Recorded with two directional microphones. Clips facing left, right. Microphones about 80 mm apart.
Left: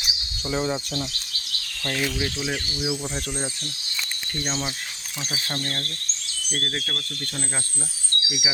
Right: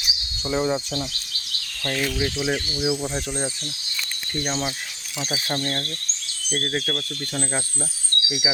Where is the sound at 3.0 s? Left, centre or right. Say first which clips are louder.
Right 3 dB; centre.